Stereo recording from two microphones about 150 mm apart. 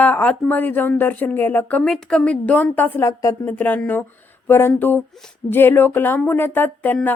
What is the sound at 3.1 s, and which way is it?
Speech, 20° left (ahead or behind).